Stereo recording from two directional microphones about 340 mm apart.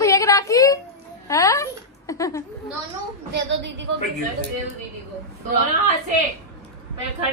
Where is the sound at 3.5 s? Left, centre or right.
Right.